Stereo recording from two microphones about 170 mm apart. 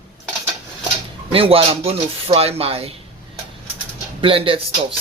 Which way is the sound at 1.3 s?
35° right (ahead or behind).